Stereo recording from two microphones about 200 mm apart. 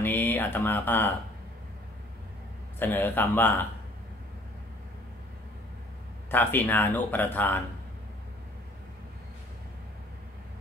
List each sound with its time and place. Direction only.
0.0 s speech: 10° left (ahead or behind)
2.8 s speech: 10° left (ahead or behind)
6.3 s speech: 10° left (ahead or behind)